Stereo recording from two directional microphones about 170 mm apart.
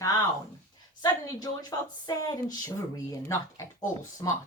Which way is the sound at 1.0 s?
25° left (ahead or behind).